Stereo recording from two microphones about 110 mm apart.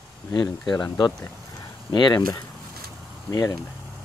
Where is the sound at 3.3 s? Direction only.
35° left (ahead or behind).